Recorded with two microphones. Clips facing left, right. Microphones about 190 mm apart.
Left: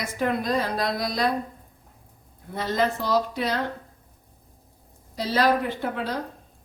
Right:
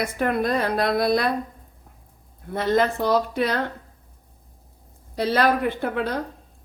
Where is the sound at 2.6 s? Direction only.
55° right (ahead or behind).